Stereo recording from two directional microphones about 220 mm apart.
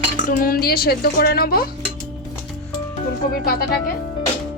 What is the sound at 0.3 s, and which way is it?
Speech, 40° left (ahead or behind).